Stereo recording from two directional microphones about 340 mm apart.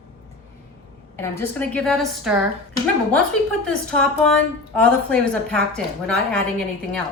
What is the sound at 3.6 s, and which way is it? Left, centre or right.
A woman's voice, centre.